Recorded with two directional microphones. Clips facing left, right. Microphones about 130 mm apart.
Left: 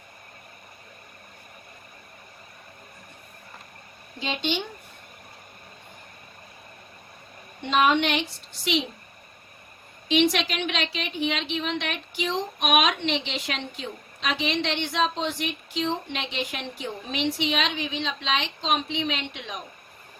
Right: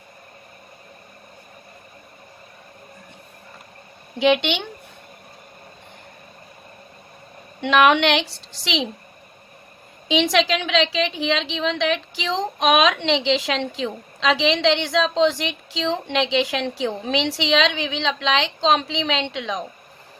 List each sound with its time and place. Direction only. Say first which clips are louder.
4.2 s speech: right 10 dB; 75° right (ahead or behind)
7.6 s a woman's voice: right 5 dB; 75° right (ahead or behind)
10.1 s a woman's voice: right 4 dB; 90° right